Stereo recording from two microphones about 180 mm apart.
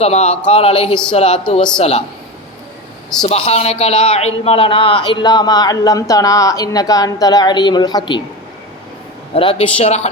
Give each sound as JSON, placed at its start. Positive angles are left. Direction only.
{"t": 0.0, "sound": "speech", "side_deg": 35}
{"t": 3.2, "sound": "a man's voice", "side_deg": 35}
{"t": 9.3, "sound": "speech", "side_deg": 30}